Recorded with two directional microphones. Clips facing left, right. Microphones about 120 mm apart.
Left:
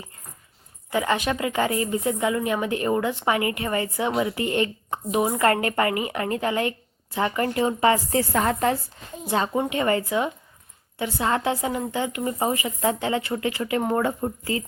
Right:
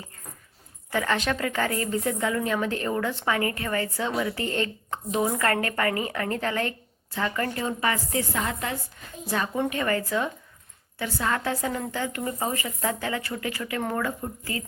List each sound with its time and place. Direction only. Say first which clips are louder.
0.9 s a woman's voice: left 2 dB; 15° left (ahead or behind); by 8.8 s 40° left (ahead or behind)
9.2 s a woman's voice: left 3 dB; 25° left (ahead or behind)